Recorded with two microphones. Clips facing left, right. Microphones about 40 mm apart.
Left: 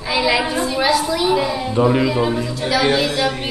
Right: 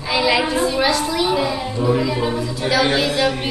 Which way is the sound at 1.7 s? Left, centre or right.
Left.